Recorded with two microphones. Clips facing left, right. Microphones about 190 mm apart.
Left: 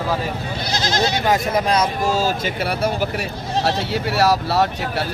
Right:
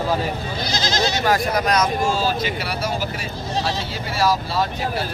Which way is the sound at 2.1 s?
45° left (ahead or behind).